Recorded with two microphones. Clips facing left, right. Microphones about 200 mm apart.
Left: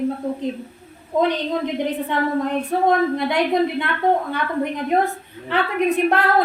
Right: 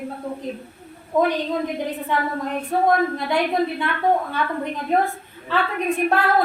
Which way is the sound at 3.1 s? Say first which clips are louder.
Left 2 dB; 20° left (ahead or behind).